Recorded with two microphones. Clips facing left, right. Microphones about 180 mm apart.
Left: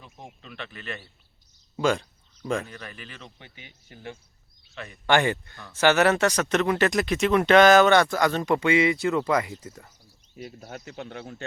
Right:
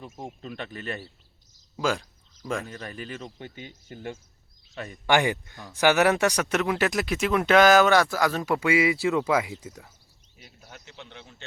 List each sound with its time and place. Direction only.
0.3 s speech: 40° right (ahead or behind)
1.7 s speech: centre (ahead or behind)
2.6 s speech: 40° right (ahead or behind)
4.7 s speech: 40° right (ahead or behind)
5.0 s speech: 15° right (ahead or behind)
10.3 s speech: 50° left (ahead or behind)